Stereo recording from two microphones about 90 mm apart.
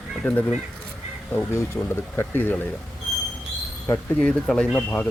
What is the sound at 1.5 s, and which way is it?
Speech, 30° left (ahead or behind).